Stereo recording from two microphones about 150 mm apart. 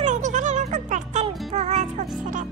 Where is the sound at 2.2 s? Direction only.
60° right (ahead or behind).